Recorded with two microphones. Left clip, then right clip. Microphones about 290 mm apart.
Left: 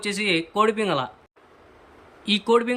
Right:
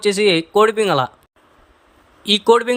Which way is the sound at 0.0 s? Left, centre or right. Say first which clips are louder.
Right 8 dB; centre.